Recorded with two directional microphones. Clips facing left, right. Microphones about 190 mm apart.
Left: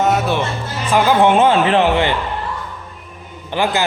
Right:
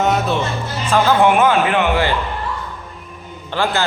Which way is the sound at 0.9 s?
15° left (ahead or behind).